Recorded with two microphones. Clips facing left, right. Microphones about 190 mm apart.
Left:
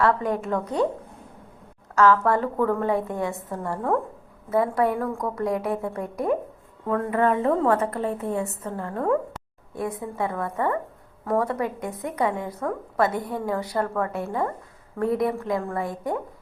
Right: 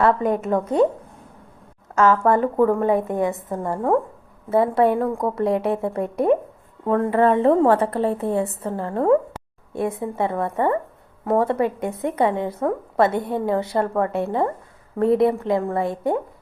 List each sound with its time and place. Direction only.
0.0 s speech: 20° right (ahead or behind)
2.0 s a woman's voice: 20° right (ahead or behind)